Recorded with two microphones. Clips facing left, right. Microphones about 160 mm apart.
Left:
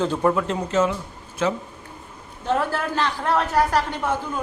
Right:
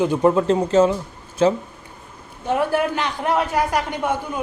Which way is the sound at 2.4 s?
10° right (ahead or behind).